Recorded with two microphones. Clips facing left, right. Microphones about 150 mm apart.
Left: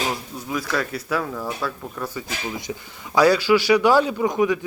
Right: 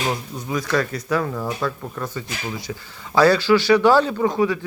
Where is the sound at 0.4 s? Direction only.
5° left (ahead or behind).